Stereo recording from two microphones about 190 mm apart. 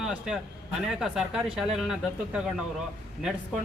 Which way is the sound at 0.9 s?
5° right (ahead or behind).